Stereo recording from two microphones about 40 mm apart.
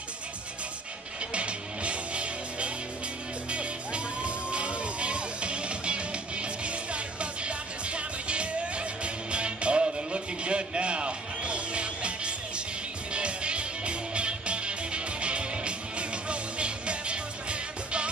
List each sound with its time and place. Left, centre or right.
1.3 s music: right